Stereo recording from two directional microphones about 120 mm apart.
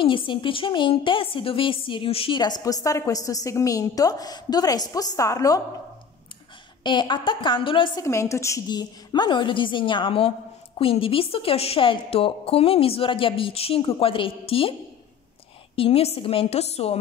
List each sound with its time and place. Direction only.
0.0 s a woman's voice: 45° left (ahead or behind)
2.4 s a woman's voice: 35° left (ahead or behind)
6.8 s a woman's voice: 40° left (ahead or behind)
8.0 s a woman's voice: 25° left (ahead or behind)
8.6 s a woman's voice: 35° left (ahead or behind)
15.7 s a woman's voice: 55° left (ahead or behind)